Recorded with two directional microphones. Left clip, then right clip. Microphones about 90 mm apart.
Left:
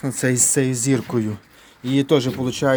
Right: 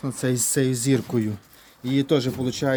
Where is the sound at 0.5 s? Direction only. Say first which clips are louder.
Left 2 dB; 15° right (ahead or behind).